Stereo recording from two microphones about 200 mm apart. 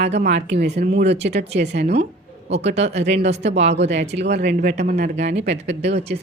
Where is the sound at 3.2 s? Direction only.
35° right (ahead or behind).